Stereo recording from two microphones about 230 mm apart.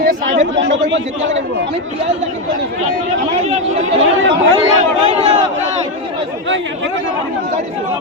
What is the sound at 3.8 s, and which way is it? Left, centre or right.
Speech, right.